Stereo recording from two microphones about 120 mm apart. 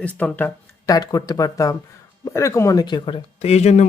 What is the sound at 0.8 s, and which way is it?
Speech, 30° left (ahead or behind).